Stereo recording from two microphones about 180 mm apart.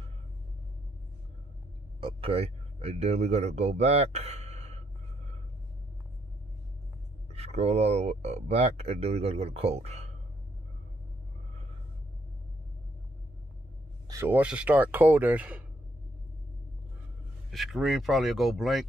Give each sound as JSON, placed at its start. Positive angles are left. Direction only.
{"t": 2.0, "sound": "speech", "side_deg": -30}
{"t": 7.3, "sound": "speech", "side_deg": -35}
{"t": 14.0, "sound": "speech", "side_deg": -15}
{"t": 17.5, "sound": "speech", "side_deg": 0}